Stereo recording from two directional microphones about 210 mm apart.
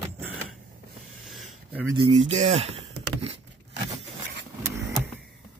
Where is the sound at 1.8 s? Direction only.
25° right (ahead or behind).